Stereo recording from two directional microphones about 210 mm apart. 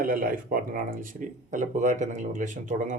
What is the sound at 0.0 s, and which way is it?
Speech, 40° right (ahead or behind).